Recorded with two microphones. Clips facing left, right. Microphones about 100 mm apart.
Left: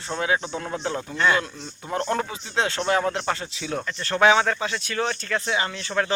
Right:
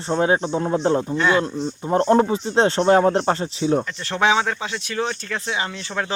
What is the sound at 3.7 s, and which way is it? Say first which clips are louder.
Speech: right 2 dB; 15° right (ahead or behind).